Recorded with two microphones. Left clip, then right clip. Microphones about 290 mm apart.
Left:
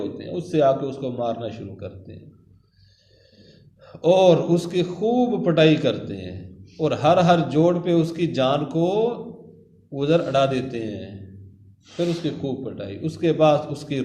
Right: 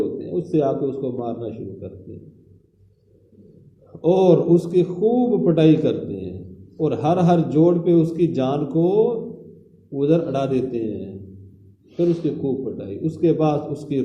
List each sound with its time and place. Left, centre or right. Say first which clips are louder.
0.2 s a man's voice: even; left
4.0 s a man's voice: even; left